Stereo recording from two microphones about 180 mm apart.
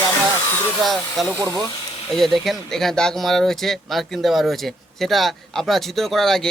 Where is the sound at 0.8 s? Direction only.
Centre (ahead or behind).